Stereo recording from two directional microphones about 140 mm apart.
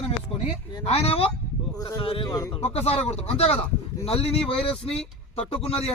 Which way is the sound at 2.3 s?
25° left (ahead or behind).